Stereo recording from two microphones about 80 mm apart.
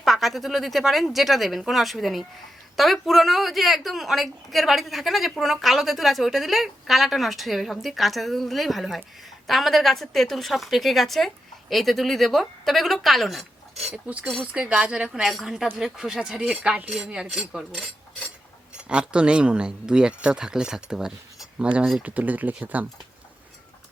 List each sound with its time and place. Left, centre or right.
0.0 s a woman's voice: centre
14.4 s a woman's voice: centre
18.9 s speech: centre